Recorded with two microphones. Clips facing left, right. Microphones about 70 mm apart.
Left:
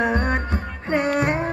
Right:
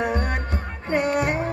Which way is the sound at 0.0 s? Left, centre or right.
Left.